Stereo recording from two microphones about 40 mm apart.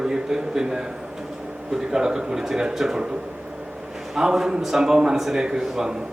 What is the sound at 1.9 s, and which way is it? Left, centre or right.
A man's voice, centre.